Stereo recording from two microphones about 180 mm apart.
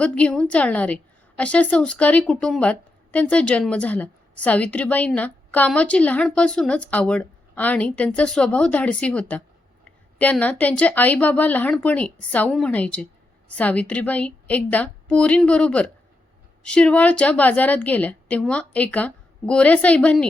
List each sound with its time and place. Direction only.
0.0 s speech: 5° left (ahead or behind)